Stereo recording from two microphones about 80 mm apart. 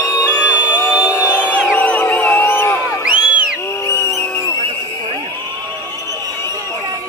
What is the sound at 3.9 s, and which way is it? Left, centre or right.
Vehicle, left.